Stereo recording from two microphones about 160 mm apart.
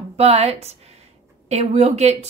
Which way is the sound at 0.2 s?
40° right (ahead or behind).